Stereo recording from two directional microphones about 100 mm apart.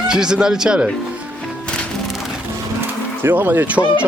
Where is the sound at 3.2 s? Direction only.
20° right (ahead or behind).